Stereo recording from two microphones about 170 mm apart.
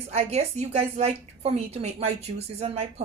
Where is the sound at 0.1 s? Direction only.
40° right (ahead or behind).